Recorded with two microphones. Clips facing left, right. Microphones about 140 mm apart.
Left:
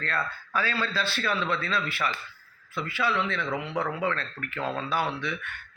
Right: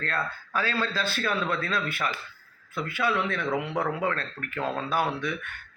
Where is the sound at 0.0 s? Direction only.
45° right (ahead or behind).